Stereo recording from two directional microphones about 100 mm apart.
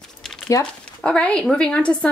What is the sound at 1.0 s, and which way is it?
A woman's voice, 10° left (ahead or behind).